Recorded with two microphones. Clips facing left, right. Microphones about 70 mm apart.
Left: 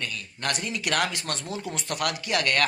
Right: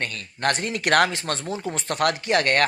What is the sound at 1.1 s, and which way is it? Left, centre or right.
A man's voice, right.